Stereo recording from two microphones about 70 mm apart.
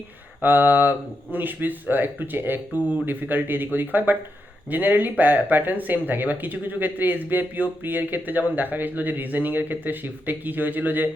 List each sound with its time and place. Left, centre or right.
0.4 s speech: right